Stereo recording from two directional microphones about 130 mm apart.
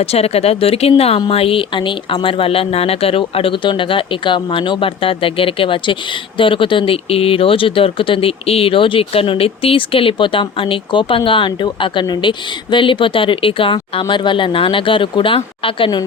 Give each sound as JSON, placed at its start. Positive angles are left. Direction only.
{"t": 0.0, "sound": "speech", "side_deg": 50}